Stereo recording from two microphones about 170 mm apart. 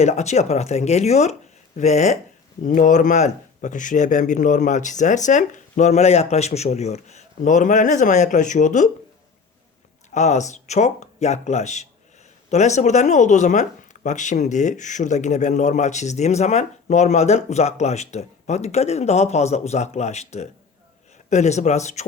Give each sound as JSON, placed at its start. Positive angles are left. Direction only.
{"t": 0.0, "sound": "speech", "side_deg": 40}
{"t": 10.2, "sound": "speech", "side_deg": 45}